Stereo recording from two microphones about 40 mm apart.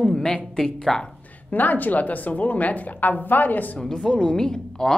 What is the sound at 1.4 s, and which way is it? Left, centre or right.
A woman's voice, left.